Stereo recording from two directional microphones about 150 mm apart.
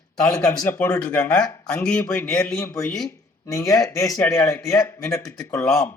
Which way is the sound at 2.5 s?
20° left (ahead or behind).